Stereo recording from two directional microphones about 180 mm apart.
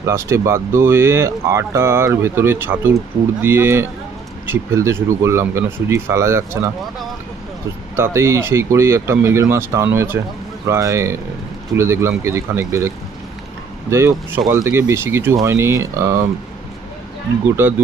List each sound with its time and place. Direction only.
0.0 s speech: 15° right (ahead or behind)
7.9 s speech: 15° right (ahead or behind)
13.9 s speech: 15° right (ahead or behind)
17.6 s speech: 10° right (ahead or behind)